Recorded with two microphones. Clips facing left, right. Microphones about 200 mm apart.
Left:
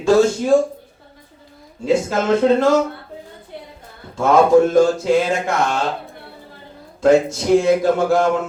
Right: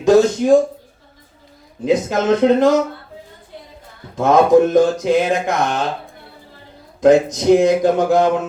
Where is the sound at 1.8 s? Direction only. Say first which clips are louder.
Right 1 dB; 20° right (ahead or behind).